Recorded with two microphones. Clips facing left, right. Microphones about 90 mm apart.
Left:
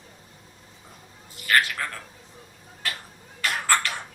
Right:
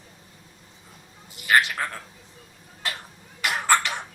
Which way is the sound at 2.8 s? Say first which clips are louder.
Right 1 dB; 25° right (ahead or behind).